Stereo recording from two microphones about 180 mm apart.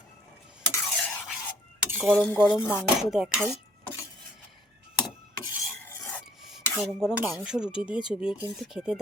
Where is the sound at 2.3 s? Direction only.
25° left (ahead or behind).